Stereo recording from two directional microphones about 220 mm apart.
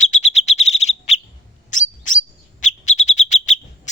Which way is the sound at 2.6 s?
35° left (ahead or behind).